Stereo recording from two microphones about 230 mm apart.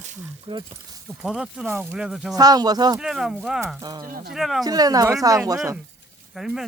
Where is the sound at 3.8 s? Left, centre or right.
Centre.